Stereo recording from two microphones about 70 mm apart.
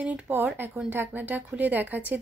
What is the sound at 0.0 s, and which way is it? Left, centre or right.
Speech, right.